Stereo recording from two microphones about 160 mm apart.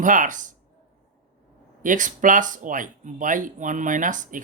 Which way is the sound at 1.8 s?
55° right (ahead or behind).